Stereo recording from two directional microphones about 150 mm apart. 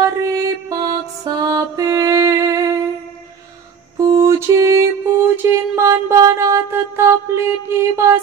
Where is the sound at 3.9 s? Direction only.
20° right (ahead or behind).